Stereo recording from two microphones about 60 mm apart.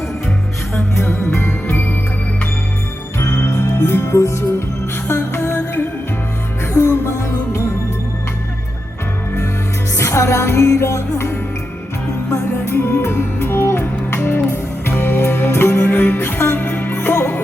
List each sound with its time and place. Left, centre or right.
0.9 s music: left
3.2 s music: left
6.7 s music: left
10.0 s music: left